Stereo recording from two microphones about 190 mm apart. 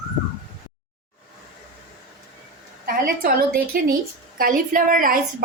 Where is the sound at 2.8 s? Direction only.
50° right (ahead or behind).